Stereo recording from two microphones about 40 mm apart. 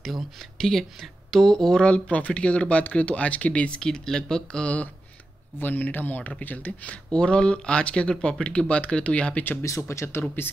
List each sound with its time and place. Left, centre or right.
0.6 s speech: centre
1.8 s speech: left
3.9 s speech: centre
5.6 s speech: left
7.1 s speech: left
9.6 s speech: left
10.4 s speech: left